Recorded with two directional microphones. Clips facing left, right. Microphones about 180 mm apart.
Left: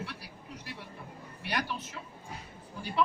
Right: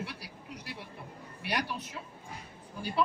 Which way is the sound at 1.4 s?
10° right (ahead or behind).